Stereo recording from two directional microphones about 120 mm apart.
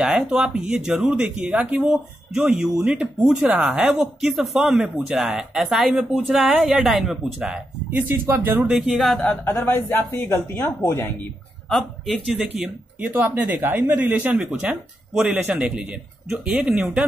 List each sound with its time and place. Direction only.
0.0 s a man's voice: 5° right (ahead or behind)
8.6 s speech: 5° right (ahead or behind)
9.5 s speech: 20° left (ahead or behind)
11.7 s speech: centre (ahead or behind)
12.4 s a man's voice: 10° right (ahead or behind)